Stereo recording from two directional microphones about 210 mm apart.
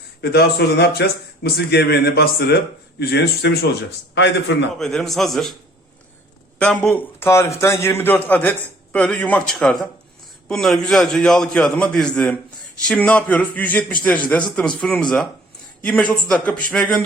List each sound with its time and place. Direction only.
0.2 s a man's voice: 50° left (ahead or behind)
4.8 s a man's voice: centre (ahead or behind)
6.6 s a man's voice: 5° left (ahead or behind)